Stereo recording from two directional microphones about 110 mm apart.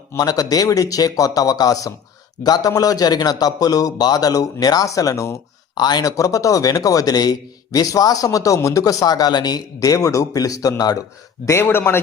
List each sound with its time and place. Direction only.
0.2 s a man's voice: 35° left (ahead or behind)
11.4 s a man's voice: 20° left (ahead or behind)